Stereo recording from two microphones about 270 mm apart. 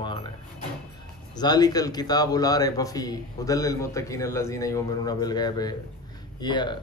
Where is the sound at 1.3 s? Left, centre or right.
Centre.